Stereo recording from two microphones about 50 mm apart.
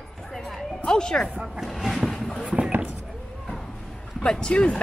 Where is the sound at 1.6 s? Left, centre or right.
Centre.